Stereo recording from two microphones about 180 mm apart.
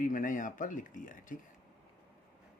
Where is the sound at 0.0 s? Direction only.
50° left (ahead or behind).